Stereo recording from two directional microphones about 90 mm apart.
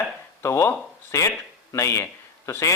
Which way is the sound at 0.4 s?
30° left (ahead or behind).